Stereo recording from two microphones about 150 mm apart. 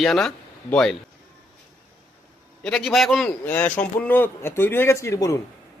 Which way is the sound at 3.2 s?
10° left (ahead or behind).